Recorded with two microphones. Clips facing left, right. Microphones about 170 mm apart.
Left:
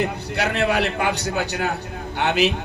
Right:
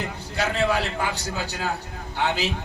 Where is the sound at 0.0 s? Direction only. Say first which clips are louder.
Left 4 dB; 65° left (ahead or behind).